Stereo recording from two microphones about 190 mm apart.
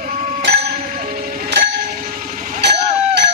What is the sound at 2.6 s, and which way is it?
Vehicle, 65° right (ahead or behind).